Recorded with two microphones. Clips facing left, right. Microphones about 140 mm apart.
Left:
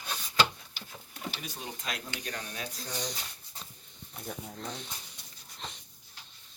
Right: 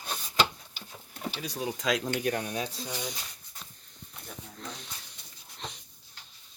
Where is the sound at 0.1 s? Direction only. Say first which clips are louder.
Even; 10° right (ahead or behind).